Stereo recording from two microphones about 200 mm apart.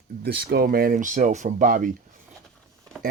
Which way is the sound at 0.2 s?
50° right (ahead or behind).